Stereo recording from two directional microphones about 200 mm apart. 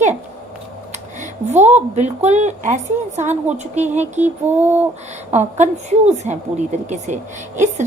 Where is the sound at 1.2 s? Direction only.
35° right (ahead or behind).